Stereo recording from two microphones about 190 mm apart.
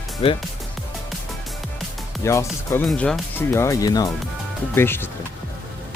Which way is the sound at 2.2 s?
15° left (ahead or behind).